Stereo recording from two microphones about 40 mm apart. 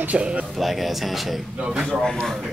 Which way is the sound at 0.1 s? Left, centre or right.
Right.